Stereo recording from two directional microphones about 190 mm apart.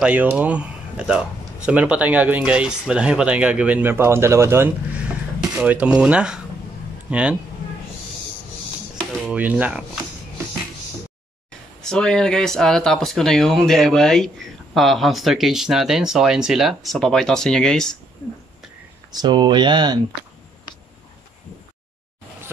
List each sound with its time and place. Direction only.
0.0 s speech: 10° right (ahead or behind)
9.2 s speech: 5° right (ahead or behind)
11.8 s speech: 5° left (ahead or behind)
19.1 s speech: 20° right (ahead or behind)